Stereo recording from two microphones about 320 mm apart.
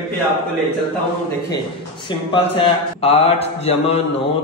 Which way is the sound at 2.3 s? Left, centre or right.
Centre.